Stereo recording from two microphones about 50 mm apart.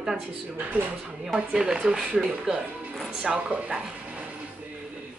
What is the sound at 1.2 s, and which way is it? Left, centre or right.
Speech, centre.